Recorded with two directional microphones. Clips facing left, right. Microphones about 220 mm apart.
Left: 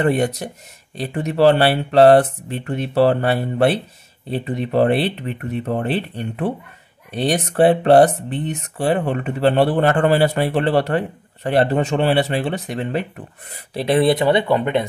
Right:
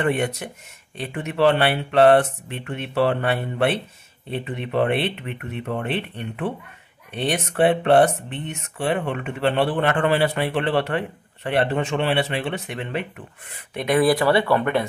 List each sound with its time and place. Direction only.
0.0 s speech: 35° left (ahead or behind); by 14.9 s 20° left (ahead or behind)